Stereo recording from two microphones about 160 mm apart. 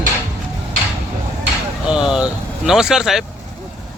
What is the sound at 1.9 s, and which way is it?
Speech, 5° right (ahead or behind).